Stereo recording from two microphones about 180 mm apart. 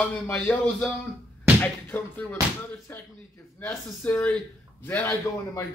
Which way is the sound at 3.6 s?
10° left (ahead or behind).